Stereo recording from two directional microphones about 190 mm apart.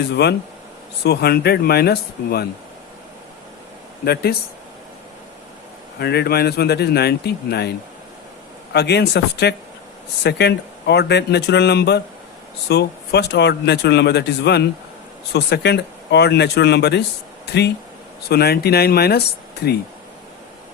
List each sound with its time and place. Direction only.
0.2 s speech: 55° left (ahead or behind)
4.0 s speech: 55° left (ahead or behind)
6.0 s speech: 60° left (ahead or behind)
8.7 s speech: 60° left (ahead or behind)